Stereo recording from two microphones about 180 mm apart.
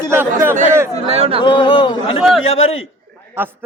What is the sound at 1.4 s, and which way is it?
Speech, 25° left (ahead or behind).